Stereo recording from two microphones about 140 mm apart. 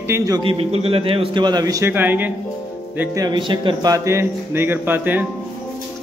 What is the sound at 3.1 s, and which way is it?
Speech, 30° right (ahead or behind).